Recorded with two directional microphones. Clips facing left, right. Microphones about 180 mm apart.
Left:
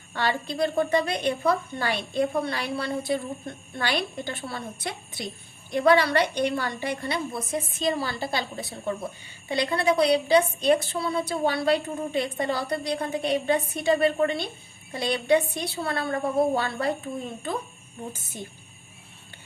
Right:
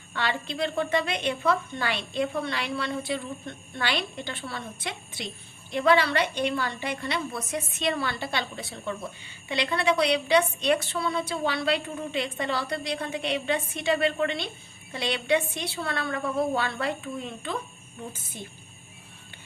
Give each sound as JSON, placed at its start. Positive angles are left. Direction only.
{"t": 0.1, "sound": "a woman's voice", "side_deg": 40}